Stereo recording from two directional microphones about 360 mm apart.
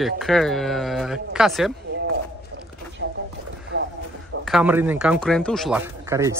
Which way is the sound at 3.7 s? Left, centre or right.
Right.